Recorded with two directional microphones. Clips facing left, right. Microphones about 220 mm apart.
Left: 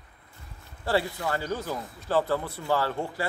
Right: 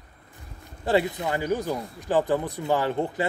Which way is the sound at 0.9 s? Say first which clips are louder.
Right 4 dB; 20° right (ahead or behind).